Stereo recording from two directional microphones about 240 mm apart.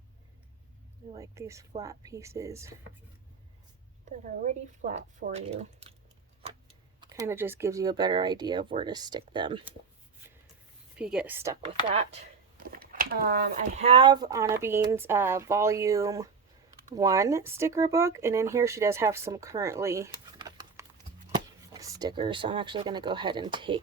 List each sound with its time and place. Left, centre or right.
1.2 s speech: centre
4.2 s speech: right
7.0 s speech: centre
10.9 s a woman's voice: centre
12.7 s speech: right
13.7 s speech: right